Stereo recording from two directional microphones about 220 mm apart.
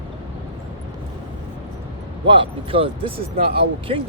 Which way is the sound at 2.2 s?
25° right (ahead or behind).